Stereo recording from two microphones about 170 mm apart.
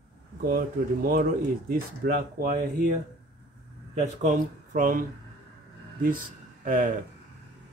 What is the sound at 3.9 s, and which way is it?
Speech, 40° right (ahead or behind).